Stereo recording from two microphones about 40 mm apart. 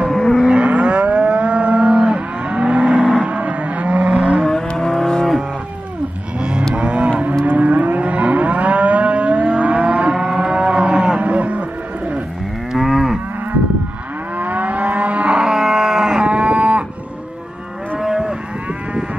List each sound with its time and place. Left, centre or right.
0.1 s livestock: centre
0.4 s livestock: right
3.2 s vehicle: right
4.1 s vehicle: right
4.7 s livestock: centre
6.7 s cattle: right
7.4 s livestock: right
10.1 s livestock: centre
10.5 s cattle: right
12.7 s moo: centre
14.4 s vehicle: right
15.3 s cattle: centre
17.9 s cattle: centre